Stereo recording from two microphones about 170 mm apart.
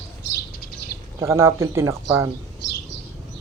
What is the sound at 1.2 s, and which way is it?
Speech, 15° right (ahead or behind).